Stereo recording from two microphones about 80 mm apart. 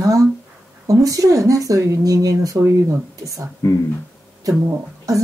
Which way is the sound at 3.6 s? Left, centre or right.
Left.